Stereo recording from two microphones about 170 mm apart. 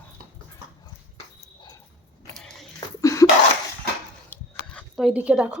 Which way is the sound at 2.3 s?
Centre (ahead or behind).